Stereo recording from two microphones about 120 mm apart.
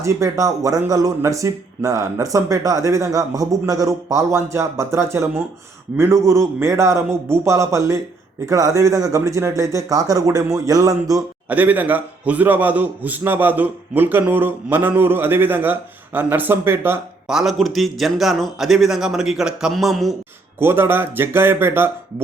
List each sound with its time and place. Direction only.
0.0 s speech: 25° right (ahead or behind)
11.4 s a man's voice: 15° right (ahead or behind)
17.2 s a man's voice: 5° right (ahead or behind)
20.6 s speech: 20° right (ahead or behind)